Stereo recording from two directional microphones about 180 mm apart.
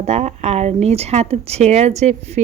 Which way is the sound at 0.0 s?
35° right (ahead or behind).